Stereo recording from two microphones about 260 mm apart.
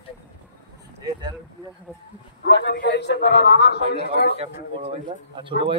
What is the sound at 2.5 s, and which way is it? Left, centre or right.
Speech, left.